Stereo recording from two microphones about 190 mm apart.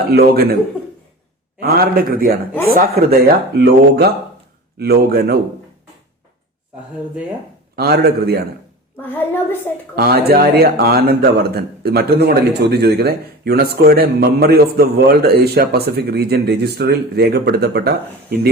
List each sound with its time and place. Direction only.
0.1 s a man's voice: 55° right (ahead or behind)
1.5 s a man's voice: 55° right (ahead or behind)
7.8 s a man's voice: 55° right (ahead or behind)
9.0 s a child's voice: 10° left (ahead or behind)
9.9 s a man's voice: 55° right (ahead or behind)